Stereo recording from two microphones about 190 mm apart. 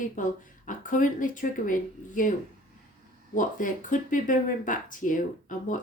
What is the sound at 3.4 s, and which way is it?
Speech, 45° left (ahead or behind).